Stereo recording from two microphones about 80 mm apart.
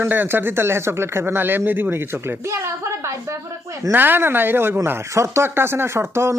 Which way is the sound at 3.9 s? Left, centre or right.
Right.